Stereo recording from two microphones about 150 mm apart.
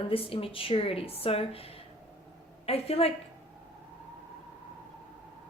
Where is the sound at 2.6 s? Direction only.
40° left (ahead or behind).